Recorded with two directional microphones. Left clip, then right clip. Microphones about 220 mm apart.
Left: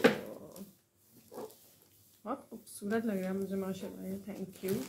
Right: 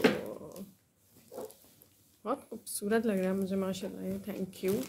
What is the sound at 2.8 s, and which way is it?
Speech, 50° right (ahead or behind).